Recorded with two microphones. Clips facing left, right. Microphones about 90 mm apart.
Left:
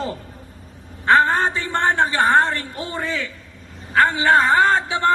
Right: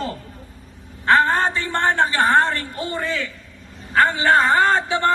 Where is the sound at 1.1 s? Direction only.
5° left (ahead or behind).